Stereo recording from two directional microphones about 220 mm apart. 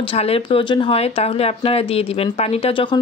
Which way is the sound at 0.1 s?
25° left (ahead or behind).